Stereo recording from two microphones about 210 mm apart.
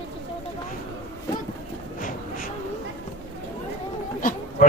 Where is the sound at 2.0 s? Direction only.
40° left (ahead or behind).